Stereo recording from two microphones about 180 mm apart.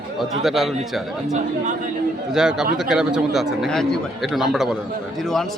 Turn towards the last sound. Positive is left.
turn(degrees=0)  # may be behind; listen again after turning